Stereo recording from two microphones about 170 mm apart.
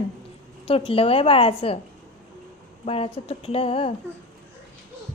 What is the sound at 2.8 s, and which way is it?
Speech, 35° left (ahead or behind).